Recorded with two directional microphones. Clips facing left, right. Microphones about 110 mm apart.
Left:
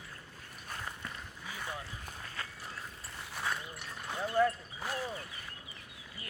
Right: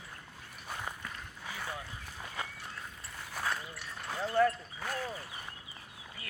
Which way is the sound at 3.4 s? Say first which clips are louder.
Right 1 dB; centre (ahead or behind).